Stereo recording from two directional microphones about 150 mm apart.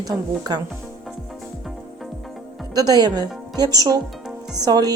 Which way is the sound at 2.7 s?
25° right (ahead or behind).